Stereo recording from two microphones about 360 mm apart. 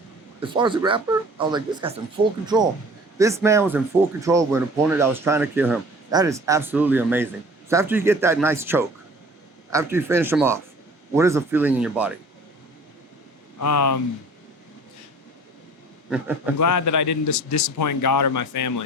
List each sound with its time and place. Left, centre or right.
0.4 s speech: centre
3.2 s speech: centre
13.6 s a man's voice: left
16.0 s speech: centre
16.6 s a man's voice: left